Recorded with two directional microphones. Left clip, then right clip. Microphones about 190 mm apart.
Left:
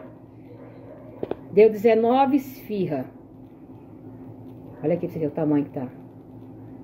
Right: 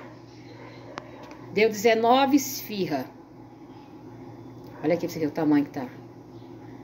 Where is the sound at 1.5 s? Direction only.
30° left (ahead or behind).